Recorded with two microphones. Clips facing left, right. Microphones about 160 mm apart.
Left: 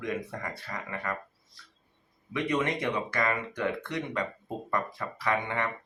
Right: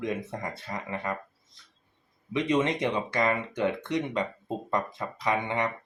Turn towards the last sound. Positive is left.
turn(degrees=-20)  # may be behind; listen again after turning